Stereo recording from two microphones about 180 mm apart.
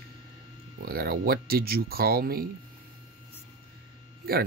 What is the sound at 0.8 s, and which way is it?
Speech, 55° right (ahead or behind).